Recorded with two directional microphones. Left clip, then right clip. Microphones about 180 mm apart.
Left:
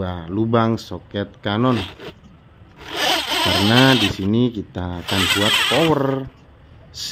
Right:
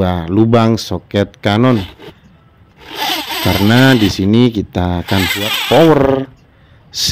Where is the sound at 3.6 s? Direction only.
45° right (ahead or behind).